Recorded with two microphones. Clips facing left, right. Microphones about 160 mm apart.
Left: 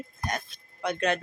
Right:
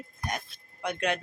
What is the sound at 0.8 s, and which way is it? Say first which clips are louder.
Speech: left 3 dB; 10° right (ahead or behind).